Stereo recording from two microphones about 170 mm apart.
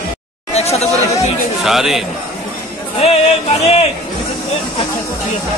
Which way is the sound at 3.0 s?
35° left (ahead or behind).